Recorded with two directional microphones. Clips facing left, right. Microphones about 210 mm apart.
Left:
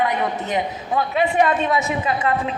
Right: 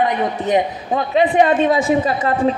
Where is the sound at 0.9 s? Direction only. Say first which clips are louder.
Right 4 dB; 30° right (ahead or behind).